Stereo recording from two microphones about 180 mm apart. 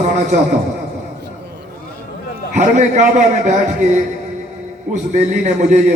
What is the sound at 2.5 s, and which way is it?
A man's voice, 40° right (ahead or behind).